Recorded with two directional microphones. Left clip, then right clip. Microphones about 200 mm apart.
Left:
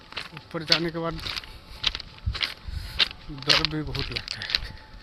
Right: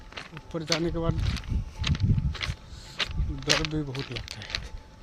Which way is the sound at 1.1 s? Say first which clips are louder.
Left 4 dB; 50° left (ahead or behind).